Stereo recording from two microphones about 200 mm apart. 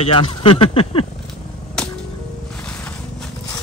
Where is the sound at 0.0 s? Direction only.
25° left (ahead or behind).